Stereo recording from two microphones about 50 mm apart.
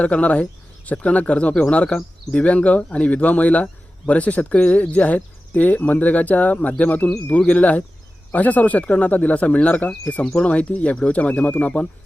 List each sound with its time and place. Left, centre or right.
0.0 s speech: left